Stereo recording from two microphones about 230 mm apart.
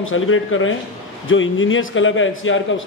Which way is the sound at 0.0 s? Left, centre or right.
Left.